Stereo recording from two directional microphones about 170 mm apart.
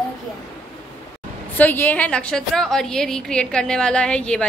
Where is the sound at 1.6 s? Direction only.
10° left (ahead or behind).